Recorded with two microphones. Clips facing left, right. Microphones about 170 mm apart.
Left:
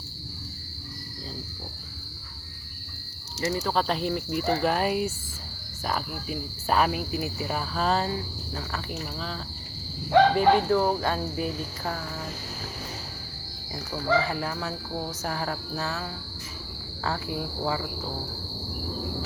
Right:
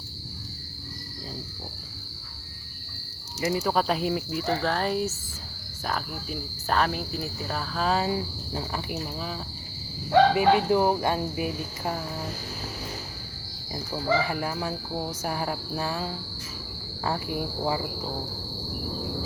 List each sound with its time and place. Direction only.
3.4 s speech: 10° right (ahead or behind)
8.1 s cricket: 15° right (ahead or behind)
13.9 s cricket: 10° right (ahead or behind)